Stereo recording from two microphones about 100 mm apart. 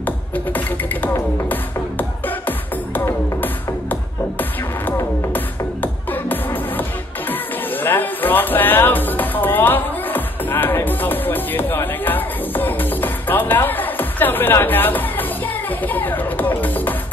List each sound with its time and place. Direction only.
1.5 s music: 20° left (ahead or behind)